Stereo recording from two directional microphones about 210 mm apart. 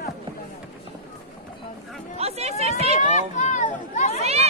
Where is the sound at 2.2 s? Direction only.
30° right (ahead or behind).